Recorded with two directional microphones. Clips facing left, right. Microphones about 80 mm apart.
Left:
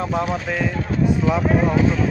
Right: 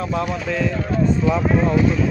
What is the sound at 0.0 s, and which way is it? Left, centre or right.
Speech, left.